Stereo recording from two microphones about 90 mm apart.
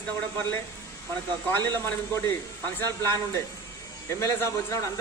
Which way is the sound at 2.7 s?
30° left (ahead or behind).